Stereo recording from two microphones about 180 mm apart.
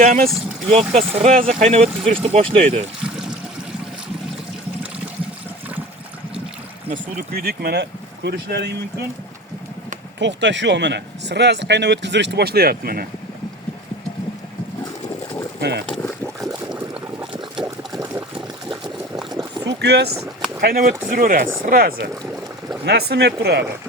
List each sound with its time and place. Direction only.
0.0 s speech: 45° right (ahead or behind)
0.7 s speech: 35° right (ahead or behind)
3.0 s trickle: 5° right (ahead or behind)
6.9 s speech: 60° right (ahead or behind)
10.2 s speech: 80° right; by 13.1 s 55° right (ahead or behind)
15.9 s boat: 5° left (ahead or behind)
16.9 s a sound: 5° right (ahead or behind)
17.9 s a sound: 15° right (ahead or behind)
18.3 s liquid: centre (ahead or behind)
19.3 s boat: 20° right (ahead or behind)
19.6 s boat: 70° right (ahead or behind)
20.6 s speech: 55° right (ahead or behind)
22.9 s speech: 65° right (ahead or behind)